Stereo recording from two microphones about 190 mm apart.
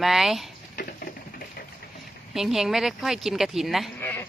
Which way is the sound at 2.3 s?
Centre (ahead or behind).